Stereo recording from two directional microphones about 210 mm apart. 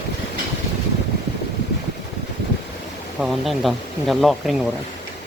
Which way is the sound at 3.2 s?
Centre (ahead or behind).